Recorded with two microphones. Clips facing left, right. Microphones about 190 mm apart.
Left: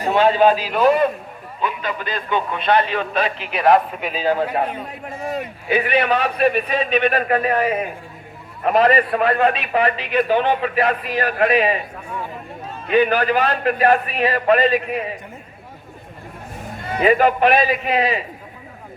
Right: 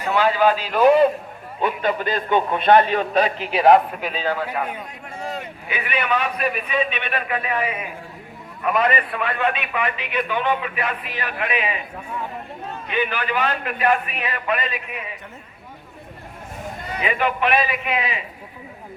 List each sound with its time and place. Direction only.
0.0 s a man's voice: 30° left (ahead or behind)
1.6 s a man's voice: 50° right (ahead or behind); by 3.8 s 25° right (ahead or behind)
4.0 s a man's voice: 10° left (ahead or behind)
4.4 s a man's voice: 30° left (ahead or behind)
12.9 s a man's voice: 40° left (ahead or behind)
17.0 s a man's voice: 40° left (ahead or behind)